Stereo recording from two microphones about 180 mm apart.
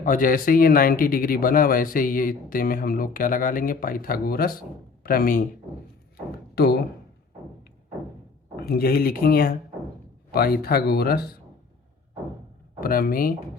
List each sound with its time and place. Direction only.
0.0 s speech: 50° left (ahead or behind)
6.6 s speech: 60° left (ahead or behind)
8.5 s speech: 60° left (ahead or behind)
12.8 s speech: 55° left (ahead or behind)